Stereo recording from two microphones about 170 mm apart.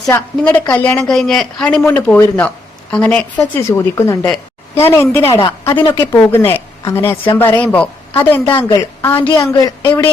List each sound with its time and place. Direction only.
0.1 s a woman's voice: 10° left (ahead or behind)
5.7 s speech: 30° left (ahead or behind)
6.1 s a woman's voice: 15° left (ahead or behind)
8.4 s speech: 25° left (ahead or behind)